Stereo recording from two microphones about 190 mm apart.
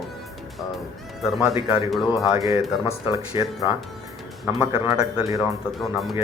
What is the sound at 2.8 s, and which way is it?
Speech, 25° left (ahead or behind).